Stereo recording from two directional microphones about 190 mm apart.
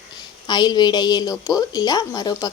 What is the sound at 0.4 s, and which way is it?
A woman's voice, 20° left (ahead or behind).